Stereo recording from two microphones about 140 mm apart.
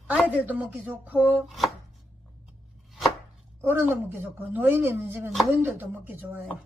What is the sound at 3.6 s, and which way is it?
Speech, 15° right (ahead or behind).